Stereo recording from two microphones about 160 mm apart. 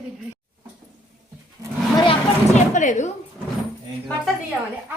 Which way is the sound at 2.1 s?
50° left (ahead or behind).